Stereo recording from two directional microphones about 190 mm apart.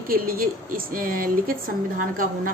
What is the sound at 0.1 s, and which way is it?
A woman's voice, 50° right (ahead or behind).